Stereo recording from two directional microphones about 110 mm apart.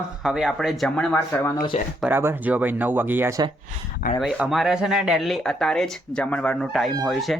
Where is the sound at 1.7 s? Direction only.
75° left (ahead or behind).